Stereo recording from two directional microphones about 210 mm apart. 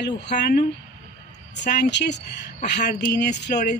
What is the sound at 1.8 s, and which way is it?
Speech, 55° left (ahead or behind).